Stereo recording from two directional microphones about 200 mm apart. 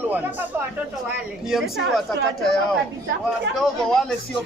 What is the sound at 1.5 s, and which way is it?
Speech, centre (ahead or behind).